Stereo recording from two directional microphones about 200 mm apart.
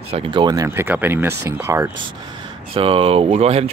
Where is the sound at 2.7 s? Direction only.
30° right (ahead or behind).